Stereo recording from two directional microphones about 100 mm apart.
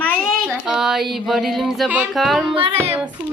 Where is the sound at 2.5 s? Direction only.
65° right (ahead or behind).